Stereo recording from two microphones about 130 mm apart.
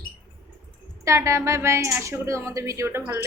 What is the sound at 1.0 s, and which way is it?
A woman's voice, 25° right (ahead or behind).